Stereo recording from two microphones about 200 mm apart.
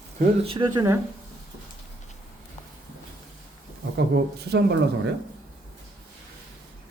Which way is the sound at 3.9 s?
55° right (ahead or behind).